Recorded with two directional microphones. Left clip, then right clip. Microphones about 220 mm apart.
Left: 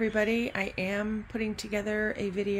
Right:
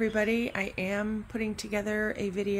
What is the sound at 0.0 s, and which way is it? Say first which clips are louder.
A woman's voice: even; centre (ahead or behind).